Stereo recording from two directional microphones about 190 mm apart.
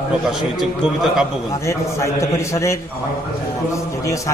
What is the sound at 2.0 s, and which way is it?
Speech, 15° left (ahead or behind).